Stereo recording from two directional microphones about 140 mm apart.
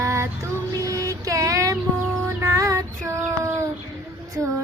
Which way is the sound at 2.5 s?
25° right (ahead or behind).